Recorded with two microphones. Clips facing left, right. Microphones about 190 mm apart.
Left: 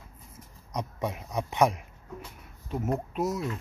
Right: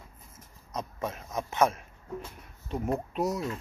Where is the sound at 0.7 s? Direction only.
15° left (ahead or behind).